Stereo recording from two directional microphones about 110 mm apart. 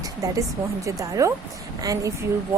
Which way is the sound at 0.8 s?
30° right (ahead or behind).